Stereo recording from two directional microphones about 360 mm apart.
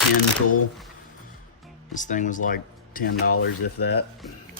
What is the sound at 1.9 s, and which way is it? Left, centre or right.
Speech, left.